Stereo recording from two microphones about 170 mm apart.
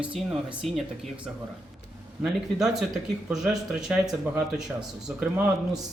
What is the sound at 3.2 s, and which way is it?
A man's voice, 5° right (ahead or behind).